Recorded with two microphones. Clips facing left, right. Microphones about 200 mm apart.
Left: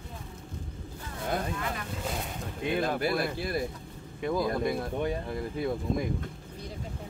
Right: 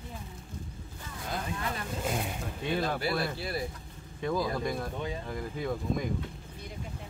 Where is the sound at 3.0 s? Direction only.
50° left (ahead or behind).